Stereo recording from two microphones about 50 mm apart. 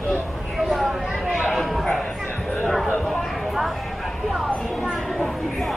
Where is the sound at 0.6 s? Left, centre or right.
Centre.